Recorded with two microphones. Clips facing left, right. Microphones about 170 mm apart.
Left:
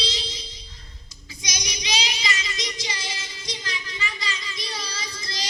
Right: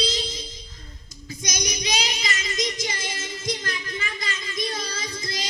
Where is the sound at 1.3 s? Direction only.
50° right (ahead or behind).